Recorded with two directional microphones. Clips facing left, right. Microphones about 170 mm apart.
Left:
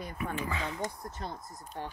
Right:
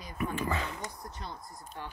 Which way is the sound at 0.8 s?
45° left (ahead or behind).